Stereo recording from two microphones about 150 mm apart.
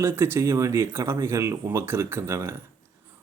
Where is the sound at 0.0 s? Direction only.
15° right (ahead or behind).